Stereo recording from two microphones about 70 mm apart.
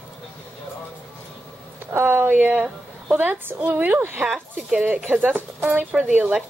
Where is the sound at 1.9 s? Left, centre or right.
Right.